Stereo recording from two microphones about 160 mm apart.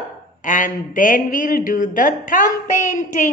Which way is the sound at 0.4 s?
55° left (ahead or behind).